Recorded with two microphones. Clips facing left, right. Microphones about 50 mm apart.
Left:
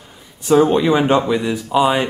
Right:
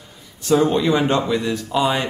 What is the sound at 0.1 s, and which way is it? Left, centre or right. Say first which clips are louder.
A man's voice: left 4 dB; centre.